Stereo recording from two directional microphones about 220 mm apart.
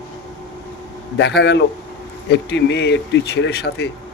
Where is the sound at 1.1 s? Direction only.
50° left (ahead or behind).